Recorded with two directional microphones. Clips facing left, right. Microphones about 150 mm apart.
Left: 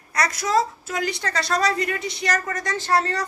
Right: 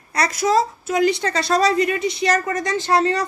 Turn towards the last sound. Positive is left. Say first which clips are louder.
# right 4 dB
turn(degrees=-20)  # may be behind; listen again after turning